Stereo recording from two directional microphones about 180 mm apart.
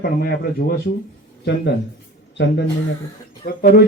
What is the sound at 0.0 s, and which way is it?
Speech, 55° left (ahead or behind).